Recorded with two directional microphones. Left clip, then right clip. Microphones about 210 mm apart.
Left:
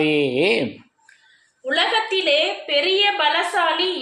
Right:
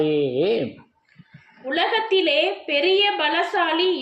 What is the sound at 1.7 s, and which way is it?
A woman's voice, 50° right (ahead or behind).